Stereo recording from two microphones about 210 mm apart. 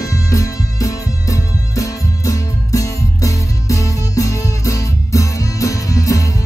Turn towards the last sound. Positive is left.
turn(degrees=15)  # may be behind; listen again after turning